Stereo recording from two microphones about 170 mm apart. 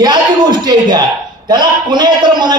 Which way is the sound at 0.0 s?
25° right (ahead or behind).